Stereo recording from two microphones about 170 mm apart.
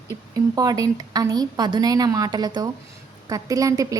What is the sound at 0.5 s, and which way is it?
A woman's voice, 20° right (ahead or behind).